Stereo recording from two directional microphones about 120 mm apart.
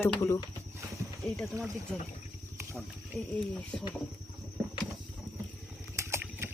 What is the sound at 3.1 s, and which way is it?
Speech, 25° left (ahead or behind).